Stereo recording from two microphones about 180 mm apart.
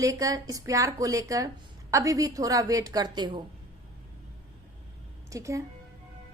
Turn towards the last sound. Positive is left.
turn(degrees=-15)  # may be behind; listen again after turning